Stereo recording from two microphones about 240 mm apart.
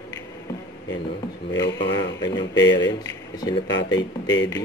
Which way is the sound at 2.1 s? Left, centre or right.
Centre.